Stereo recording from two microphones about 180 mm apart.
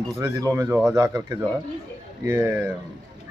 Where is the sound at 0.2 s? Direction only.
15° right (ahead or behind).